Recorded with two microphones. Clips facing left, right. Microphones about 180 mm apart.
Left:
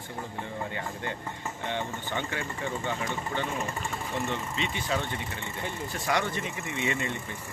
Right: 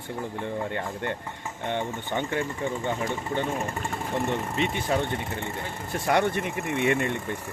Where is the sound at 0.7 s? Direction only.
60° right (ahead or behind).